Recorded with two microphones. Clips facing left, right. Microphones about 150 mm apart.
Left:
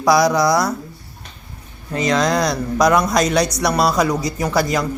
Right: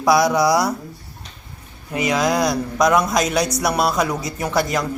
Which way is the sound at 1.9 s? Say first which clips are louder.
Left 2 dB; 10° right (ahead or behind).